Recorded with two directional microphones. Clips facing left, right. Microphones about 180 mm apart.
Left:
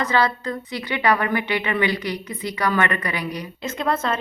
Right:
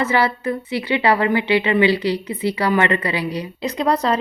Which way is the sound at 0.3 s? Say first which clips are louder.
Right 5 dB; 25° right (ahead or behind).